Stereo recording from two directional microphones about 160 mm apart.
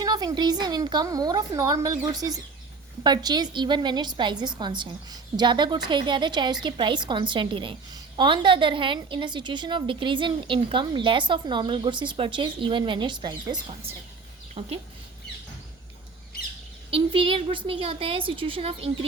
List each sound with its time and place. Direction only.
0.0 s a woman's voice: 25° right (ahead or behind)
16.9 s a woman's voice: 35° right (ahead or behind)